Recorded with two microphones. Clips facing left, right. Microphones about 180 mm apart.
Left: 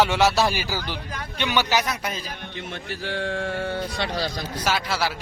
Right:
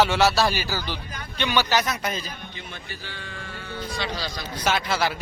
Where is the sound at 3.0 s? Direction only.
75° left (ahead or behind); by 4.3 s 55° left (ahead or behind).